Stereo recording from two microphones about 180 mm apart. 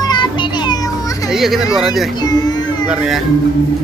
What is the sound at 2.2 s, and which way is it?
Baby cry, 20° left (ahead or behind).